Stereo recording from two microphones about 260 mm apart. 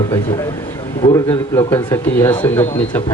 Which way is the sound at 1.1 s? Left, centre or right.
Centre.